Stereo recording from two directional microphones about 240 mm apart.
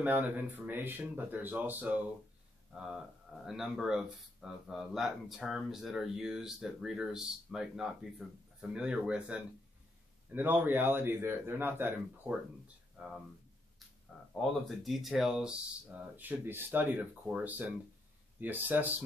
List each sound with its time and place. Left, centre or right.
0.0 s a man's voice: centre
14.3 s a man's voice: centre